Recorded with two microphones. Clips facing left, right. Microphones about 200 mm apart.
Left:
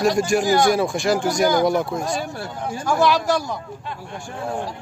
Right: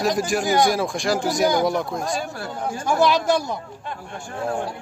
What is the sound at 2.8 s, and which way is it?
Speech, 20° right (ahead or behind).